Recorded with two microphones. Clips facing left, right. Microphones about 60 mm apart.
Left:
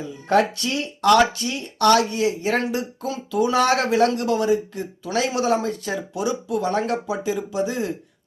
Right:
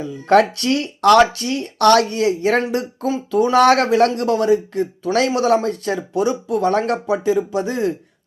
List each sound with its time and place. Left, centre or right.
0.0 s speech: right